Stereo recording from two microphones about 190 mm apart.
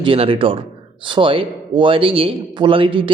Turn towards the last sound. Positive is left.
turn(degrees=-25)  # may be behind; listen again after turning